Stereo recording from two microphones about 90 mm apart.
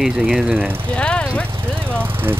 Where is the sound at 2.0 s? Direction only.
25° right (ahead or behind).